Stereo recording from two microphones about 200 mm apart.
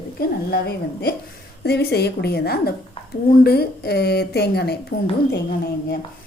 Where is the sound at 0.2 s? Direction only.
50° left (ahead or behind).